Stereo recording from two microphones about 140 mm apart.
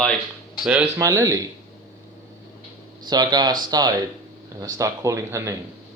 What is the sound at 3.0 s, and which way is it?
Speech, 30° right (ahead or behind).